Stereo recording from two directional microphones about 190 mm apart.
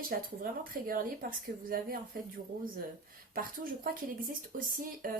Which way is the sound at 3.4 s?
50° right (ahead or behind).